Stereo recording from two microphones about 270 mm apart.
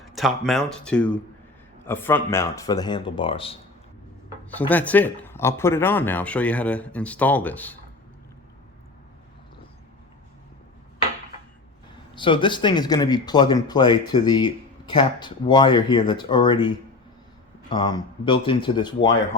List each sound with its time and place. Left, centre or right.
0.1 s speech: centre
4.7 s speech: centre
12.1 s speech: centre